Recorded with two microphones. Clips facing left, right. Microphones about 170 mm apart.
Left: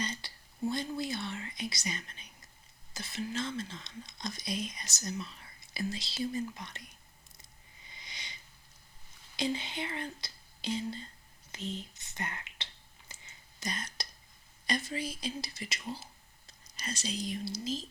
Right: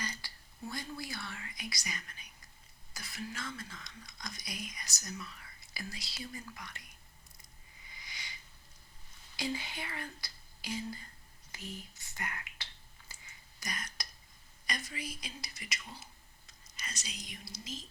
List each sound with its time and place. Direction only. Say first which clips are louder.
0.0 s whispering: left 5 dB; 20° left (ahead or behind)
2.9 s speech: left 7 dB; 25° left (ahead or behind)
7.9 s a sound: left 1 dB; 20° left (ahead or behind)
9.3 s speech: left 4 dB; 20° left (ahead or behind)
13.1 s a sound: left 2 dB; 25° left (ahead or behind)
14.7 s speech: left 7 dB; 30° left (ahead or behind)